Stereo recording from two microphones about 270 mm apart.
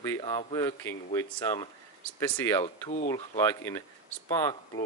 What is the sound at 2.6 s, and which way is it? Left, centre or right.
Speech, left.